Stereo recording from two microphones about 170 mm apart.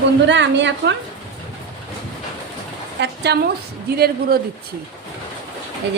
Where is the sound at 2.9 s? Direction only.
80° right.